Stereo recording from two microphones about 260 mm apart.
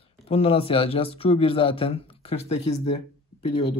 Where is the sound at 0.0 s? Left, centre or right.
Left.